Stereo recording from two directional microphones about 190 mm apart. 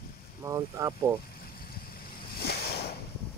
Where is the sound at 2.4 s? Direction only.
60° left (ahead or behind).